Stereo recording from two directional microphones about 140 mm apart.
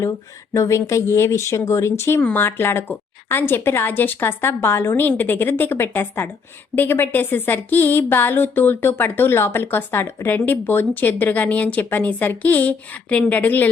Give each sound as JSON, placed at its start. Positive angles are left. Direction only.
{"t": 0.5, "sound": "speech", "side_deg": 20}